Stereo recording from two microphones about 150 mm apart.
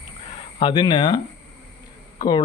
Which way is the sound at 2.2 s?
30° left (ahead or behind).